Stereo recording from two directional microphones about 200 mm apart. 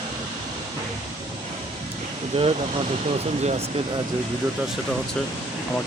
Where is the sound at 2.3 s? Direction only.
30° right (ahead or behind).